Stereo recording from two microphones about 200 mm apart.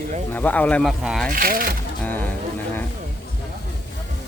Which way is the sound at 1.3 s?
45° right (ahead or behind).